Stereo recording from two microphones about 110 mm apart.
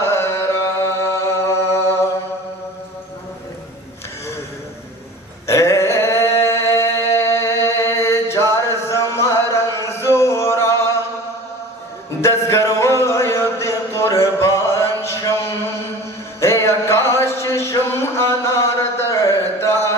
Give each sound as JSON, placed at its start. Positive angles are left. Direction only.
{"t": 0.0, "sound": "chant", "side_deg": 25}
{"t": 5.5, "sound": "a sound", "side_deg": 25}
{"t": 8.9, "sound": "music", "side_deg": 25}
{"t": 12.2, "sound": "music", "side_deg": 25}
{"t": 13.6, "sound": "a sound", "side_deg": 25}
{"t": 16.4, "sound": "music", "side_deg": 25}